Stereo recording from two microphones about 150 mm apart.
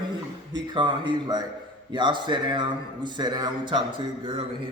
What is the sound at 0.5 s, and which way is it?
A man's voice, 30° right (ahead or behind).